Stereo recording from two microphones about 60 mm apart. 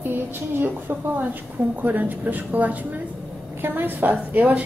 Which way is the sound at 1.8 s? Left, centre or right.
Right.